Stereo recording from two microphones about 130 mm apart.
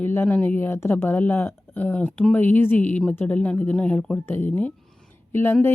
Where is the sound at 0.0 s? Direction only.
15° left (ahead or behind).